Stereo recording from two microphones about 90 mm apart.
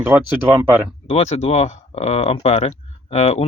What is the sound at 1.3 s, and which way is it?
Speech, 90° left.